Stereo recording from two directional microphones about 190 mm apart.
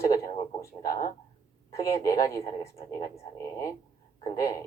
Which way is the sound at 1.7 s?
15° left (ahead or behind).